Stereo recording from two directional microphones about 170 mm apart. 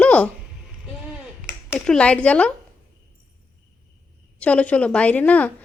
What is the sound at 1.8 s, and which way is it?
Speech, 5° left (ahead or behind).